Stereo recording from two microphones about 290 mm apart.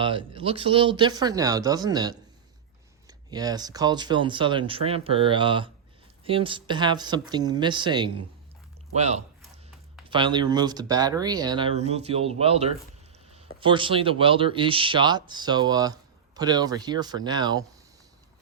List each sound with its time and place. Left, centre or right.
0.0 s speech: centre